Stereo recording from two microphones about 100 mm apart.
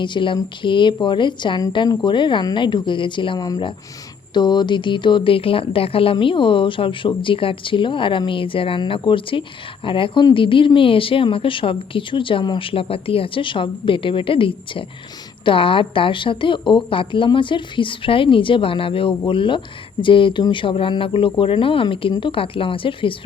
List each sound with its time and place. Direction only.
0.0 s speech: 55° left (ahead or behind)